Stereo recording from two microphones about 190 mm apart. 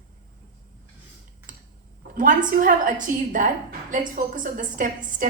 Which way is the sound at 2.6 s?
45° right (ahead or behind).